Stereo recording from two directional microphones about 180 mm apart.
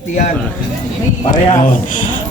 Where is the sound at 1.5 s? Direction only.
45° left (ahead or behind).